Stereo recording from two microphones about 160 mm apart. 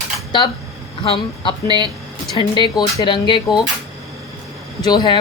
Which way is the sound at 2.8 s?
30° left (ahead or behind).